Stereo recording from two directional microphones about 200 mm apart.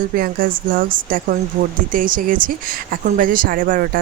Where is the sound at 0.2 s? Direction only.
45° right (ahead or behind).